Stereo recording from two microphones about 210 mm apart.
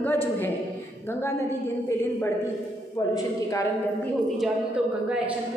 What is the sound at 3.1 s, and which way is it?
Speech, 15° left (ahead or behind).